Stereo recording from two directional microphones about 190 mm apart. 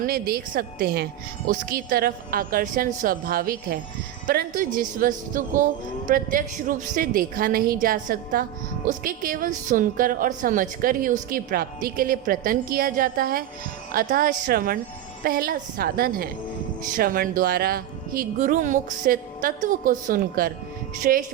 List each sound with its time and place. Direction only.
0.0 s a woman's voice: 50° right (ahead or behind)